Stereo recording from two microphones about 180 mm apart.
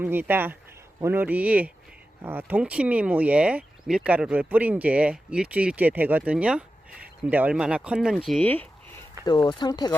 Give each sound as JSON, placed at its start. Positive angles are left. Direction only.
{"t": 0.0, "sound": "speech", "side_deg": -10}
{"t": 9.2, "sound": "speech", "side_deg": 25}